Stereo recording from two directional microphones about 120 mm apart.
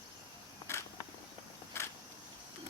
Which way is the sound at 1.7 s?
20° left (ahead or behind).